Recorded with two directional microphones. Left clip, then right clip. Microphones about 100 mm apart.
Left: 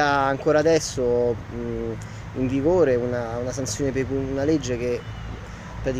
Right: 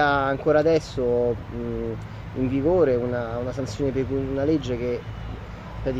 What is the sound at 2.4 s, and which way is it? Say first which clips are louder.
Speech: left 1 dB; 15° left (ahead or behind).